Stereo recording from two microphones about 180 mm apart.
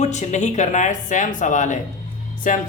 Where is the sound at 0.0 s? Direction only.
40° left (ahead or behind).